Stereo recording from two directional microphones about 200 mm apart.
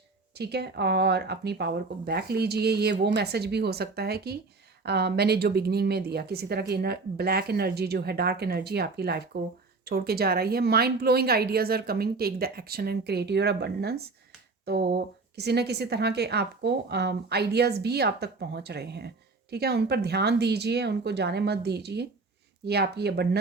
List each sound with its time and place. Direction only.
0.3 s a woman's voice: 55° right (ahead or behind)